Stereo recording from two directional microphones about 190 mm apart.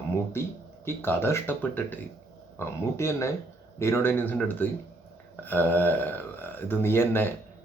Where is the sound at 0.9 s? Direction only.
10° left (ahead or behind).